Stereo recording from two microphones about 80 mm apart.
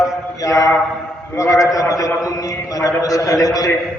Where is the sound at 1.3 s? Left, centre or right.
Left.